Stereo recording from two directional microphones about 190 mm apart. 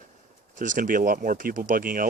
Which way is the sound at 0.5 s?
40° right (ahead or behind).